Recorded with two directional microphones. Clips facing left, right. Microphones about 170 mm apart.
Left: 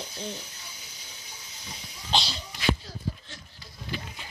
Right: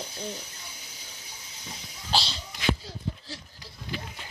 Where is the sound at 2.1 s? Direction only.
5° right (ahead or behind).